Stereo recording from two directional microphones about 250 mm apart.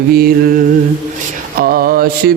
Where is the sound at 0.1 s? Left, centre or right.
Right.